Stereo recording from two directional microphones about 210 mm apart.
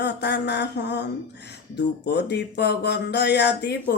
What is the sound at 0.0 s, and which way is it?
Speech, 55° left (ahead or behind).